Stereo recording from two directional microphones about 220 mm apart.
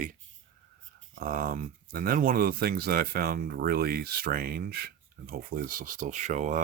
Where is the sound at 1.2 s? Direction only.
40° right (ahead or behind).